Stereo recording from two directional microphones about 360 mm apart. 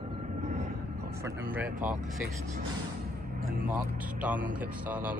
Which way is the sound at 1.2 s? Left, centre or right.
Centre.